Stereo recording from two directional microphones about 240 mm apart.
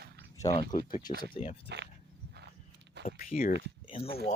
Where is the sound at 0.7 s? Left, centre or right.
Left.